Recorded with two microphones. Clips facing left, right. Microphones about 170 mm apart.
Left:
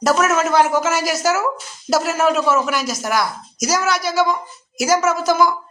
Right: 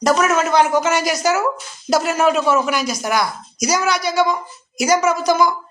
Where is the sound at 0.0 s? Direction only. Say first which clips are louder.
Right 1 dB; 5° left (ahead or behind).